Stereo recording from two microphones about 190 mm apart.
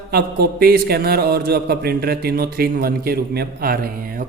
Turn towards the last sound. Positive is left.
turn(degrees=-50)  # may be behind; listen again after turning